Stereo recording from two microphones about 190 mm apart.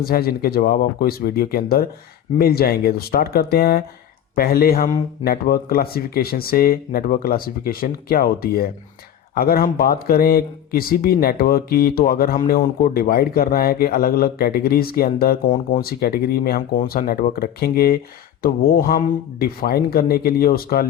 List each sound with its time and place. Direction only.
0.0 s speech: 55° left (ahead or behind)